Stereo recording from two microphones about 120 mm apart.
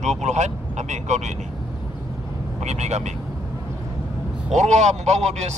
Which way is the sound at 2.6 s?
75° right (ahead or behind).